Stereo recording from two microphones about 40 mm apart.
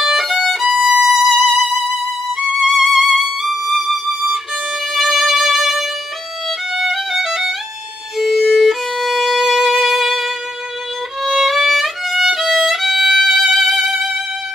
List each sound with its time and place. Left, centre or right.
0.0 s violin: centre
0.7 s violin: centre
1.3 s music: centre
6.7 s violin: centre
9.7 s music: centre
11.2 s violin: centre